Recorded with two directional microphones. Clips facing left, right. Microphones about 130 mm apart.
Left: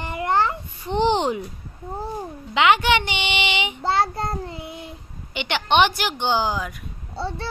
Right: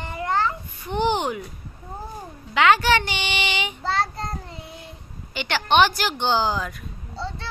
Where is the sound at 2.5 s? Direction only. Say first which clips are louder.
Even; 20° left (ahead or behind).